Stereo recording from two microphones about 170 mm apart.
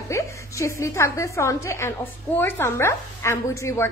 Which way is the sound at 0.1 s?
15° left (ahead or behind).